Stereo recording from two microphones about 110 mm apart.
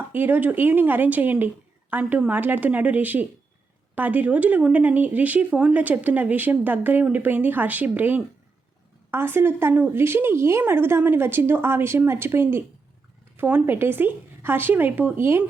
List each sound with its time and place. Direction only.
0.1 s a woman's voice: 15° right (ahead or behind)